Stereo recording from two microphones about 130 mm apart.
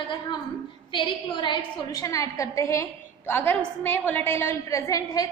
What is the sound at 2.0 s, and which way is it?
A woman's voice, 25° left (ahead or behind).